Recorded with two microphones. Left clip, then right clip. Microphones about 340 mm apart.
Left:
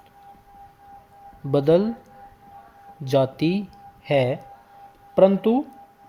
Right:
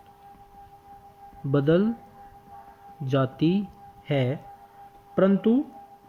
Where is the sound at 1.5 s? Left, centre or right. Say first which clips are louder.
Left 4 dB; centre.